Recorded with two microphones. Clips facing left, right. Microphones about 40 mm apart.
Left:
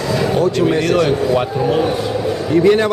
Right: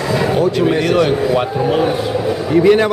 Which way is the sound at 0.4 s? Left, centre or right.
Centre.